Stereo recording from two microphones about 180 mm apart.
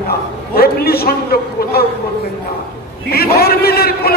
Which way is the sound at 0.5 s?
60° left (ahead or behind).